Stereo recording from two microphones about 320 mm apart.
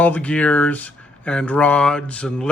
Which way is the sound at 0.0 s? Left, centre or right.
Centre.